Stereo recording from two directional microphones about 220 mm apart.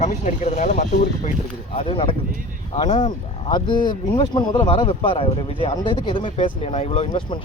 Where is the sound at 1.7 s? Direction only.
25° left (ahead or behind).